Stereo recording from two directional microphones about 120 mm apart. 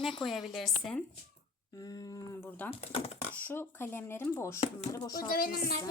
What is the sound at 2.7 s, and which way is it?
Speech, 60° left (ahead or behind).